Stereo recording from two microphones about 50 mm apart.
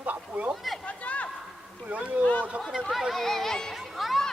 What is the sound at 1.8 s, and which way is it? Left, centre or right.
Speech, right.